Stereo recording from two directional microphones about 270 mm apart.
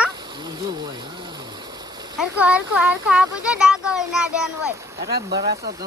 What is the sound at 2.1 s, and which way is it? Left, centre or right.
Speech, centre.